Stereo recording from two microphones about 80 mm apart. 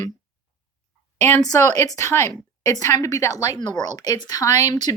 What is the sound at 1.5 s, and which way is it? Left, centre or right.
A woman's voice, left.